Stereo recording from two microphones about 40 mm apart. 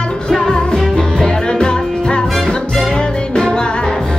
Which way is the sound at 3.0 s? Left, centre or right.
Left.